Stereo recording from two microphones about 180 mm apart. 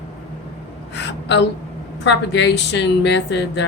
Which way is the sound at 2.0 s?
75° left (ahead or behind).